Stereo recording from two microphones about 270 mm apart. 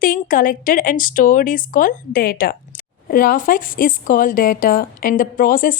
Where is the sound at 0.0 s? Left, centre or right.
Left.